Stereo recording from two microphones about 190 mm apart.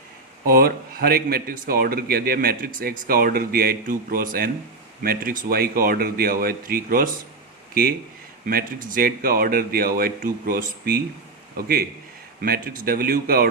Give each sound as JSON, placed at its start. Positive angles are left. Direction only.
{"t": 0.4, "sound": "a man's voice", "side_deg": -50}